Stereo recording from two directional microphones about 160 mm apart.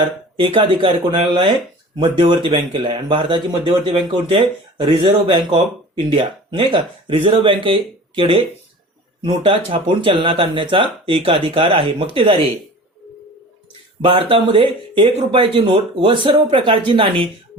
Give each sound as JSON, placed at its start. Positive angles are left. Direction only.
{"t": 0.3, "sound": "speech", "side_deg": -30}
{"t": 14.0, "sound": "speech", "side_deg": -35}